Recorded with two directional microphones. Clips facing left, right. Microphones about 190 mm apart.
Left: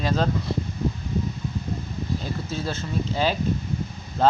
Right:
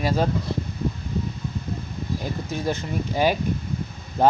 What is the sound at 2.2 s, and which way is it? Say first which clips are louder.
Speech: right 2 dB; 15° right (ahead or behind).